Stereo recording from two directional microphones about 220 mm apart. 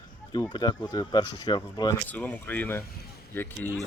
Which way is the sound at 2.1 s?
10° left (ahead or behind).